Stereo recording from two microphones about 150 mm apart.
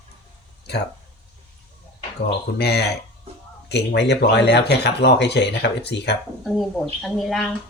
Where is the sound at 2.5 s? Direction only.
90° left.